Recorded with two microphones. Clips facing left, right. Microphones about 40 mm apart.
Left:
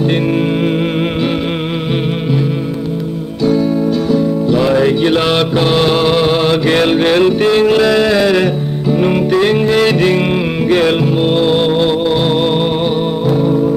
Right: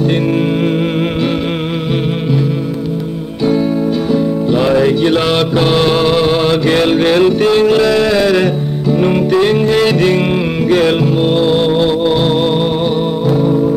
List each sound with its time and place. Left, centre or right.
4.1 s music: centre
4.7 s music: centre